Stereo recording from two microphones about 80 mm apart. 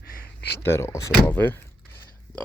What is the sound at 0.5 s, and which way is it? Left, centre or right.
Speech, left.